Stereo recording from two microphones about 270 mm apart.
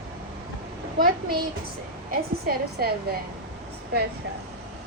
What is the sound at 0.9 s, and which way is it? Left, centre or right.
A woman's voice, right.